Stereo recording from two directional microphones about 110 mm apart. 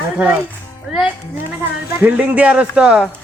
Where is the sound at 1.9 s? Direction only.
15° right (ahead or behind).